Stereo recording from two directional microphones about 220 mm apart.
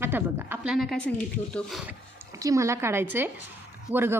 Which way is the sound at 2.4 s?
15° right (ahead or behind).